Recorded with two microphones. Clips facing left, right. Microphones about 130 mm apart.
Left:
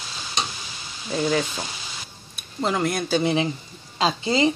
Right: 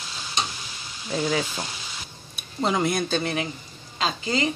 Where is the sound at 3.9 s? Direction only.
30° left (ahead or behind).